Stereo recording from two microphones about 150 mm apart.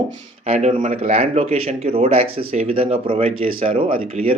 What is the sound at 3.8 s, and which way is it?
Speech, 70° right (ahead or behind).